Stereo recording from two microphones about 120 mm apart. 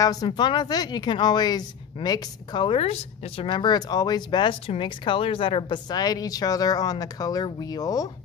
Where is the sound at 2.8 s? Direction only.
55° left (ahead or behind); by 8.1 s 30° left (ahead or behind).